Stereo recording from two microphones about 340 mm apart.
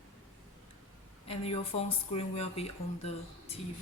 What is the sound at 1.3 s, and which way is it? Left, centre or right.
Speech, centre.